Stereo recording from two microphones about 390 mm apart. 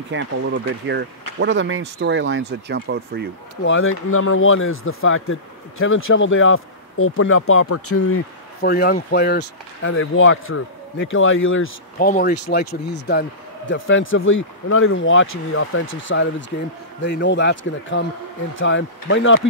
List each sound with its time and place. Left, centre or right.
0.1 s speech: right
3.6 s speech: left